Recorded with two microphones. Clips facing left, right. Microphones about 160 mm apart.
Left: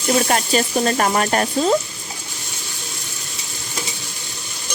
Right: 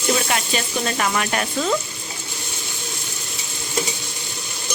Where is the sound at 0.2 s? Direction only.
40° left (ahead or behind).